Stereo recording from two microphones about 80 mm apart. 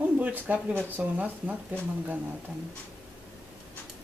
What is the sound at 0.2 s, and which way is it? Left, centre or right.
Speech, centre.